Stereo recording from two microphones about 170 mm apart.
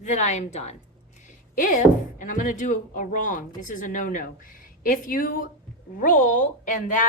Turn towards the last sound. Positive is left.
turn(degrees=50)  # may be behind; listen again after turning